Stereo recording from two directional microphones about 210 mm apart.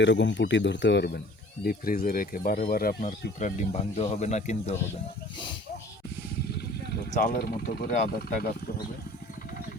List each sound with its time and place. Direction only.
0.0 s speech: 55° left (ahead or behind); by 4.8 s 30° left (ahead or behind)
7.1 s speech: 40° left (ahead or behind)